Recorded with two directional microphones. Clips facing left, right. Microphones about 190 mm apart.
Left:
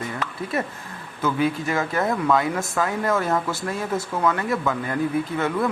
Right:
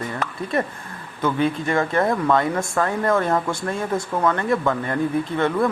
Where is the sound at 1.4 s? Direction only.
5° left (ahead or behind).